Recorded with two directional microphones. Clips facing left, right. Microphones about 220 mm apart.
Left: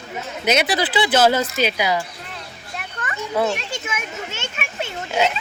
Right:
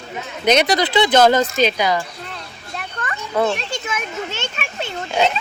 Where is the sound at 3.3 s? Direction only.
10° left (ahead or behind).